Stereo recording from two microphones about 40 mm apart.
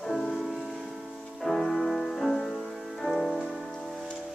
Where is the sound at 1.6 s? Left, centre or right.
Centre.